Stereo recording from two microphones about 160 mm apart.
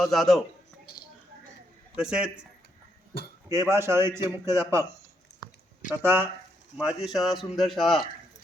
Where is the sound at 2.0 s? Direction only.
5° right (ahead or behind).